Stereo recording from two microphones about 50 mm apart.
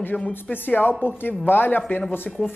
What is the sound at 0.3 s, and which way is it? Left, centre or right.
A woman's voice, left.